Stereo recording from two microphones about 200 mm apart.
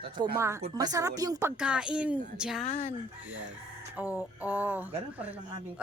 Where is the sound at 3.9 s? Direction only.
5° right (ahead or behind).